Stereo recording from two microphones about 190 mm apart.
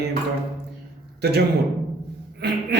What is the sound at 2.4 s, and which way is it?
Speech, 60° right (ahead or behind).